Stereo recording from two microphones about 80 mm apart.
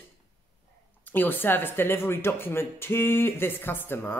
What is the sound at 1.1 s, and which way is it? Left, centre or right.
Speech, left.